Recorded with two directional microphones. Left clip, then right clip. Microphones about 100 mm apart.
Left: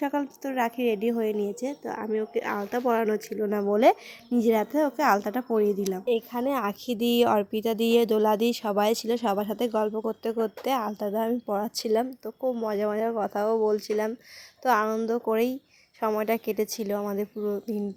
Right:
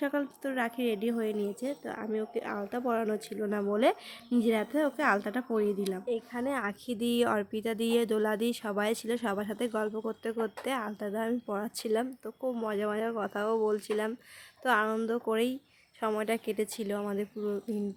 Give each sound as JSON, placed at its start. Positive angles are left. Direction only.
{"t": 0.0, "sound": "a woman's voice", "side_deg": 10}
{"t": 6.1, "sound": "a woman's voice", "side_deg": 50}
{"t": 12.2, "sound": "a woman's voice", "side_deg": 15}